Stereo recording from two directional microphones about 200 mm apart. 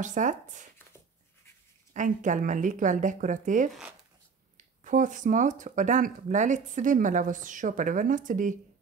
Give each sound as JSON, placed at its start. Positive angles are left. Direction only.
{"t": 0.0, "sound": "speech", "side_deg": -40}
{"t": 2.0, "sound": "speech", "side_deg": -40}